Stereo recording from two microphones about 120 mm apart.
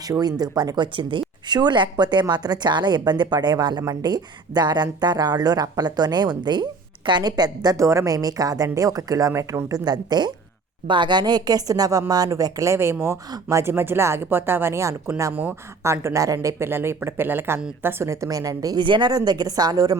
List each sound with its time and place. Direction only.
0.1 s a woman's voice: 35° right (ahead or behind)
15.3 s a woman's voice: 15° right (ahead or behind); by 20.0 s 30° right (ahead or behind)